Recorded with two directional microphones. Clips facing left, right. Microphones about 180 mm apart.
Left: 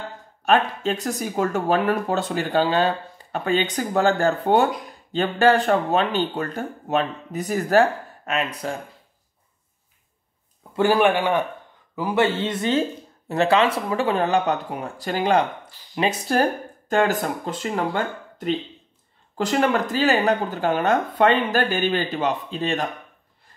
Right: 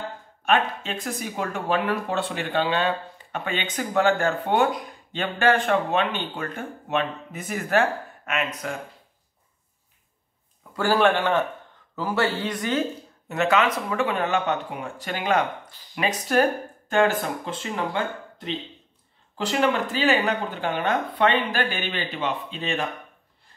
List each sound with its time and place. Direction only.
0.5 s speech: 40° left (ahead or behind)
10.8 s speech: 15° left (ahead or behind); by 22.8 s 40° left (ahead or behind)